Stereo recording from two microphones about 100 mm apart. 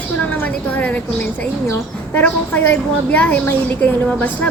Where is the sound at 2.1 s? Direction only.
20° left (ahead or behind).